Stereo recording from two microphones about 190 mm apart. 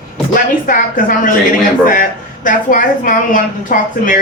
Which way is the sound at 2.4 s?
45° left (ahead or behind).